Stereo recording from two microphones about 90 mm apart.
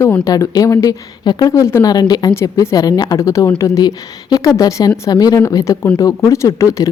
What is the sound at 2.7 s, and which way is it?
A woman's voice, 45° left (ahead or behind).